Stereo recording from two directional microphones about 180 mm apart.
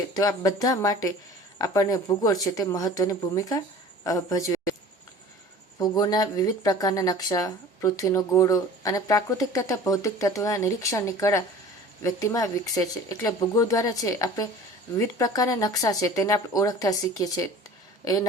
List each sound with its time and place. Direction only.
0.1 s speech: 20° left (ahead or behind)
5.8 s speech: 20° left (ahead or behind)